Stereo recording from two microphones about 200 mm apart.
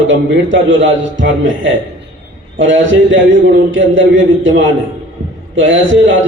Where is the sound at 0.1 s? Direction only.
70° right (ahead or behind).